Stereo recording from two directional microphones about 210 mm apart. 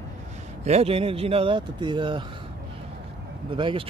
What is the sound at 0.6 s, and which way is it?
Speech, 30° right (ahead or behind).